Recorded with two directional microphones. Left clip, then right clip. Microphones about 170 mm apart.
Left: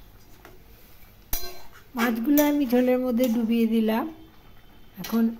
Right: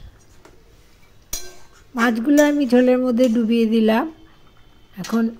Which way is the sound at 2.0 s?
25° right (ahead or behind).